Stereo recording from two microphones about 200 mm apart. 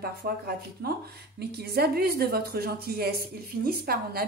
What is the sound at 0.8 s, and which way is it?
A woman's voice, 50° right (ahead or behind).